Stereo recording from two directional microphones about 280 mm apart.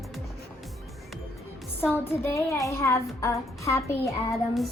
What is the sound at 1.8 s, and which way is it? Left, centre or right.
Speech, centre.